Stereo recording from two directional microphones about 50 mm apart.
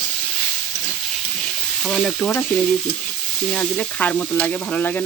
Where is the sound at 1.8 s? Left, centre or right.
Centre.